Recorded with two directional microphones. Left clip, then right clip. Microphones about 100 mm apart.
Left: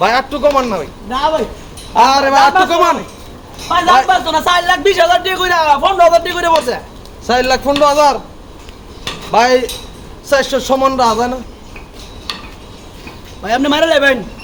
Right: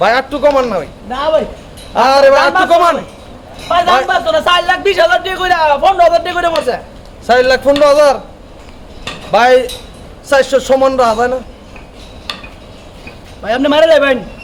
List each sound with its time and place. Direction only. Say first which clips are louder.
0.0 s speech: right 2 dB; 35° right (ahead or behind)
4.3 s a man's voice: right 1 dB; centre (ahead or behind)
7.3 s speech: right 4 dB; 40° right (ahead or behind)
9.3 s speech: right 2 dB; 40° right (ahead or behind)
12.3 s a sound: even; 5° left (ahead or behind)
13.4 s a man's voice: right 3 dB; 5° left (ahead or behind)